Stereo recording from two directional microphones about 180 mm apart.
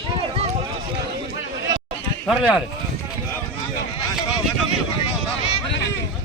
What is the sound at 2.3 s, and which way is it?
Speech, 5° right (ahead or behind).